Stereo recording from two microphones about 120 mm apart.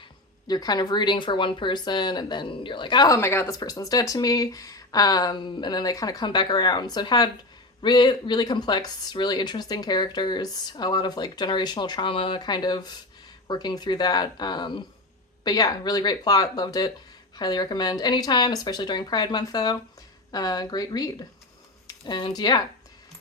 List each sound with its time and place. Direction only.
0.4 s speech: 35° left (ahead or behind)
3.2 s speech: 20° left (ahead or behind)